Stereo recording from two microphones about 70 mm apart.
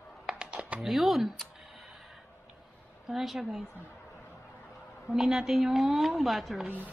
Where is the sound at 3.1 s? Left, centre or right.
Centre.